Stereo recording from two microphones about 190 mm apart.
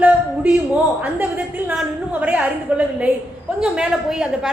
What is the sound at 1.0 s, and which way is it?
A woman's voice, 10° right (ahead or behind).